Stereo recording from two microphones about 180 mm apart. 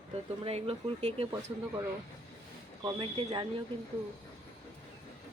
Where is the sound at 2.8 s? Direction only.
30° right (ahead or behind).